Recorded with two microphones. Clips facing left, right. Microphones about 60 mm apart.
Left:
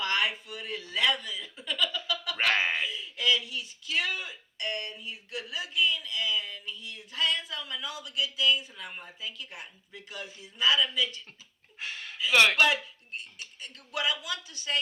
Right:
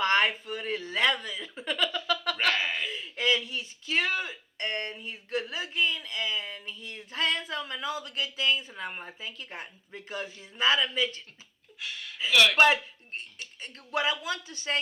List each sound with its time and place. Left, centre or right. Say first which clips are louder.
0.0 s speech: right 4 dB; right
2.5 s dog: left 3 dB; left
2.8 s speech: right 1 dB; right
11.8 s a sound: left 1 dB; left
12.3 s speech: left 1 dB; left
12.5 s speech: right 3 dB; right